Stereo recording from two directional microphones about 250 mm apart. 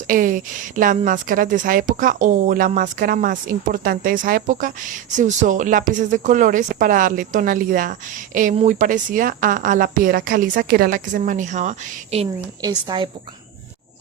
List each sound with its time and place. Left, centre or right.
0.1 s a woman's voice: right